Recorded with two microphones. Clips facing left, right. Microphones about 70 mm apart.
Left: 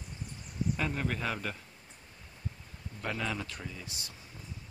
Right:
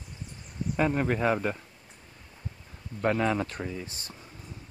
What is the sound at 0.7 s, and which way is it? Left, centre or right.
Speech, right.